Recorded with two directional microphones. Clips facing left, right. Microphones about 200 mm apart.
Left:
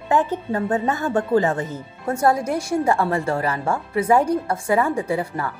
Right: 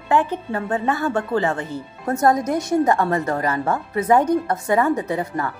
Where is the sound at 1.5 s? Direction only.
40° left (ahead or behind).